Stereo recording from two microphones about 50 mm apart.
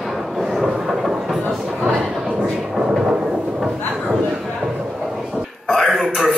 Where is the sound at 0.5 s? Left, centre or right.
Centre.